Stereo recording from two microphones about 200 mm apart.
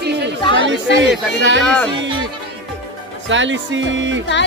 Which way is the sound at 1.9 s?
25° right (ahead or behind).